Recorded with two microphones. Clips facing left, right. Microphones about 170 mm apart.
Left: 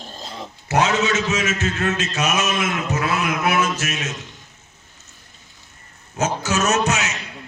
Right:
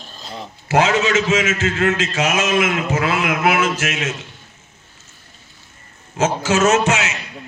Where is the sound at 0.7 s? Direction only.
90° right.